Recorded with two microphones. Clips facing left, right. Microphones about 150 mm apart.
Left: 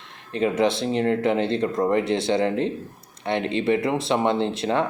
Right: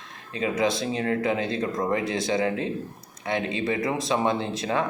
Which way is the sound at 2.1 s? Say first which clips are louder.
Left 4 dB; 30° left (ahead or behind).